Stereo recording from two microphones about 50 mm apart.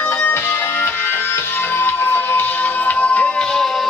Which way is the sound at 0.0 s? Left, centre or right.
Left.